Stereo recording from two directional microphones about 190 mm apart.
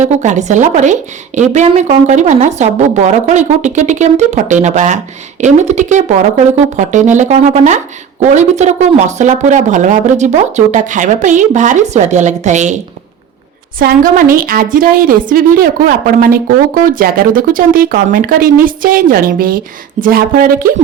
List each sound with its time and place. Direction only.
0.0 s a woman's voice: 40° right (ahead or behind)